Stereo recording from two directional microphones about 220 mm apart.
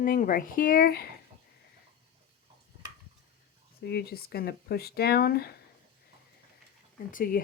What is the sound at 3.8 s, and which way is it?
Speech, 45° left (ahead or behind).